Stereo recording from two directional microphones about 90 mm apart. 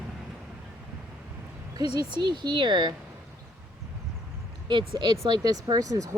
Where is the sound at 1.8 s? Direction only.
55° right (ahead or behind).